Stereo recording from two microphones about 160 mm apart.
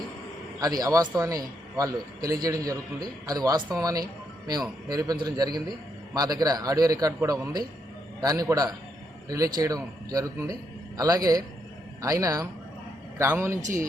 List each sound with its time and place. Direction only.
0.6 s a man's voice: 20° right (ahead or behind)